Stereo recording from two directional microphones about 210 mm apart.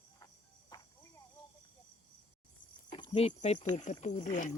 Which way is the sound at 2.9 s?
25° left (ahead or behind).